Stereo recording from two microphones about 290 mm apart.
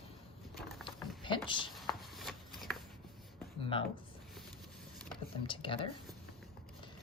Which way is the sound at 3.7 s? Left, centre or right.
Centre.